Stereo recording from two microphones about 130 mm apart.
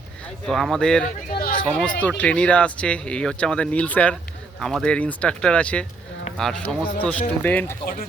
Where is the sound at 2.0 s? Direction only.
10° left (ahead or behind).